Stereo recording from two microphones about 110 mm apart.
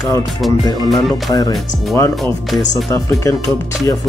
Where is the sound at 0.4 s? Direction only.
Centre (ahead or behind).